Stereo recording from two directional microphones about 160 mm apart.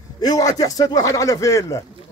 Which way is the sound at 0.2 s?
25° left (ahead or behind).